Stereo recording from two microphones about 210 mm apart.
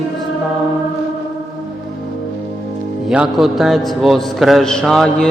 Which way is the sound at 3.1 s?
5° right (ahead or behind).